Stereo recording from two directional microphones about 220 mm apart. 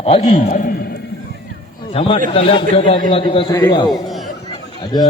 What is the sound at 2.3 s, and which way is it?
A man's voice, 25° left (ahead or behind).